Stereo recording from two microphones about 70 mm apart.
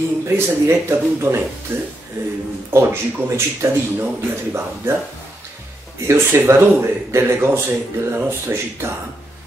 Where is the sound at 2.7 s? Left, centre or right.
Right.